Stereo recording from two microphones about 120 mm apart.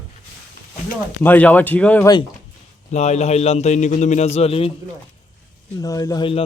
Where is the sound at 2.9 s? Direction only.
70° left (ahead or behind); by 4.7 s 55° left (ahead or behind).